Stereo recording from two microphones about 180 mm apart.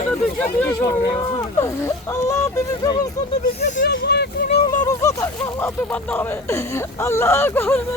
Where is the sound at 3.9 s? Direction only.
70° left (ahead or behind).